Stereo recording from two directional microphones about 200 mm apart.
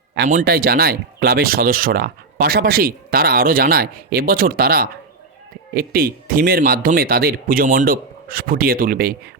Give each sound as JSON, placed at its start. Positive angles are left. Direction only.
{"t": 0.3, "sound": "speech", "side_deg": -45}